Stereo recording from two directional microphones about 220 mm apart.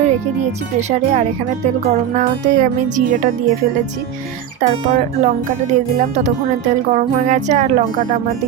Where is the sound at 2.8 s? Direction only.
35° right (ahead or behind).